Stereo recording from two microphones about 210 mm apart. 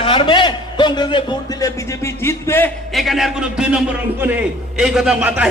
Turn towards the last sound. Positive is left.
turn(degrees=-5)  # may be behind; listen again after turning